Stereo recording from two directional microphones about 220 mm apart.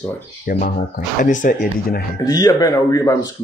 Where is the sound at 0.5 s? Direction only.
40° left (ahead or behind).